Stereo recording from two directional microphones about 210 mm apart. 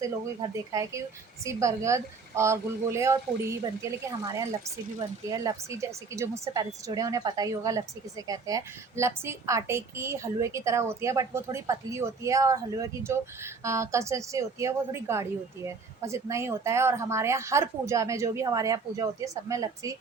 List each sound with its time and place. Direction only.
0.7 s speech: 15° right (ahead or behind)